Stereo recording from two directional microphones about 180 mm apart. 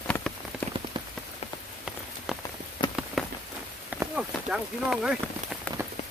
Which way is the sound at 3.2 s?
Centre (ahead or behind).